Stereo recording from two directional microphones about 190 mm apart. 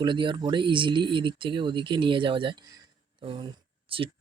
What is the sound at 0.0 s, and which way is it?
Speech, 25° right (ahead or behind).